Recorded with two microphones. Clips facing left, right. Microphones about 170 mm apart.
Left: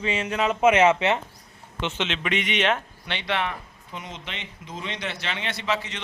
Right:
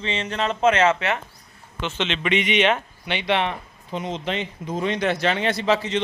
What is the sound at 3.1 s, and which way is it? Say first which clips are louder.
Speech: right 5 dB; 15° right (ahead or behind).